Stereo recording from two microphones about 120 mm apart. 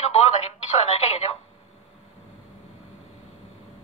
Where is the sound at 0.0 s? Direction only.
65° left (ahead or behind).